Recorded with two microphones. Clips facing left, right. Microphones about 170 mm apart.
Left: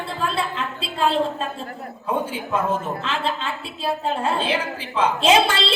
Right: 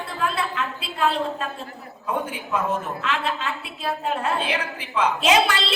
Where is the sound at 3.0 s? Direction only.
30° left (ahead or behind).